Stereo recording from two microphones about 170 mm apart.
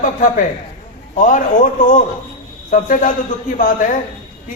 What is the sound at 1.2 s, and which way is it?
A man's voice, 50° left (ahead or behind).